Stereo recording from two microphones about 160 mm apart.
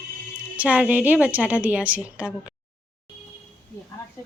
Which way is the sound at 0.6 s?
10° right (ahead or behind).